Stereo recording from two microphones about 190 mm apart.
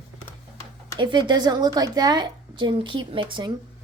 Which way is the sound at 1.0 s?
25° right (ahead or behind).